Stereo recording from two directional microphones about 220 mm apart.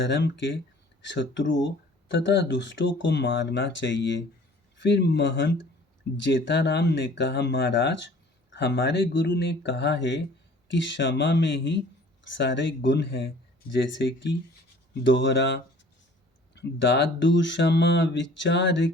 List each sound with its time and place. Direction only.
0.0 s speech: 55° left (ahead or behind)